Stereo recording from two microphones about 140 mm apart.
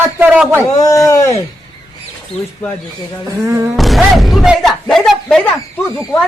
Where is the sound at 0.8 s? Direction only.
25° left (ahead or behind).